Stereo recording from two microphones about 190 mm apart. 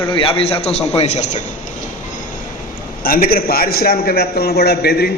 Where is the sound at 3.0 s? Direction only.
50° left (ahead or behind).